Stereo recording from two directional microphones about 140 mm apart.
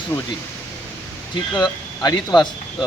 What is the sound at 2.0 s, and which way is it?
Speech, 30° left (ahead or behind).